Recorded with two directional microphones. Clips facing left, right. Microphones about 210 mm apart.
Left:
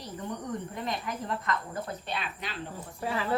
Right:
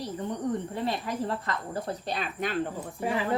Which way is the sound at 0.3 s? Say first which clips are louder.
Right 4 dB; 30° right (ahead or behind).